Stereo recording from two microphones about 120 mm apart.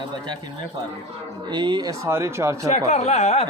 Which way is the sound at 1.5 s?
40° right (ahead or behind).